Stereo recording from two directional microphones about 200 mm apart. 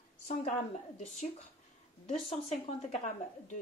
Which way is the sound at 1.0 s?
35° left (ahead or behind).